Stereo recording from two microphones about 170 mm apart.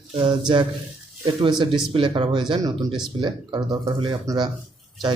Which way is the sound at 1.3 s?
30° right (ahead or behind).